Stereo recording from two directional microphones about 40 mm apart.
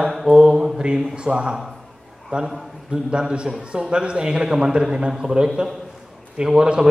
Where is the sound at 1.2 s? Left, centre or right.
Right.